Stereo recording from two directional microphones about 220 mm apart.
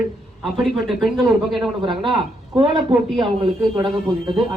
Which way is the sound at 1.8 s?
20° right (ahead or behind).